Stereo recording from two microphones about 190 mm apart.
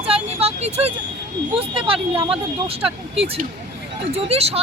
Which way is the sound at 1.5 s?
30° right (ahead or behind).